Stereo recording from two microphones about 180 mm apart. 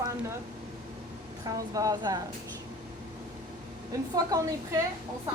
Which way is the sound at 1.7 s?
20° right (ahead or behind).